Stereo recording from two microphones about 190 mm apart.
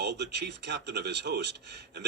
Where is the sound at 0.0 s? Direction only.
60° right (ahead or behind).